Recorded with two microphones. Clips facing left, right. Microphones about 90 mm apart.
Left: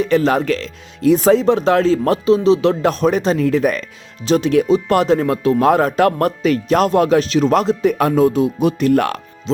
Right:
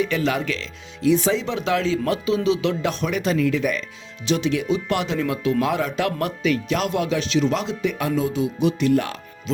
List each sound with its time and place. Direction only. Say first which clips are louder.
0.0 s speech: left 7 dB; 40° left (ahead or behind); by 9.2 s 60° left (ahead or behind)